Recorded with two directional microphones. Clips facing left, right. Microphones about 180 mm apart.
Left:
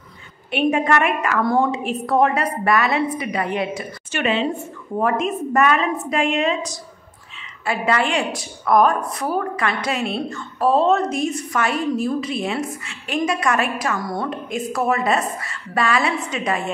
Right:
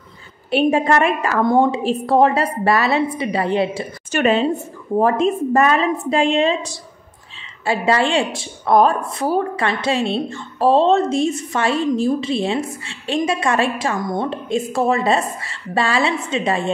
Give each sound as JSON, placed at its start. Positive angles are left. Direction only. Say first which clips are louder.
{"t": 0.5, "sound": "a woman's voice", "louder": "right 3 dB", "side_deg": -30}
{"t": 4.1, "sound": "a woman's voice", "louder": "right 5 dB", "side_deg": -40}
{"t": 4.9, "sound": "a woman's voice", "louder": "right 5 dB", "side_deg": -30}